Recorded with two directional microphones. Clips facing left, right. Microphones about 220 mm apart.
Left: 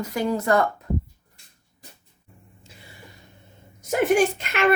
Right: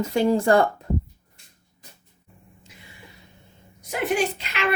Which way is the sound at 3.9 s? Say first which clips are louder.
Left 5 dB; 45° left (ahead or behind).